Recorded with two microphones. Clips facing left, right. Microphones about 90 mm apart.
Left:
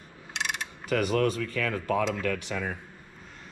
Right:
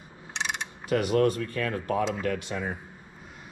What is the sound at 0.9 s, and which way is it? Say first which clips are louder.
A man's voice: right 2 dB; 15° right (ahead or behind).